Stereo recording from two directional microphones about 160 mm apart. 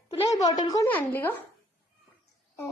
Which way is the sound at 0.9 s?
10° left (ahead or behind).